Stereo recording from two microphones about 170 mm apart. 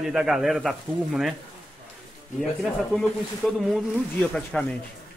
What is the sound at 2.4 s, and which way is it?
Speech, centre (ahead or behind).